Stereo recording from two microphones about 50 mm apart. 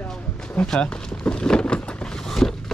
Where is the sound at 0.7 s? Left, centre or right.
Centre.